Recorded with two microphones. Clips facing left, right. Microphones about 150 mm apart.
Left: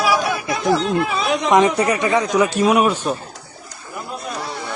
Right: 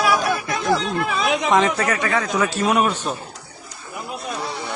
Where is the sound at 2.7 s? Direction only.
5° left (ahead or behind).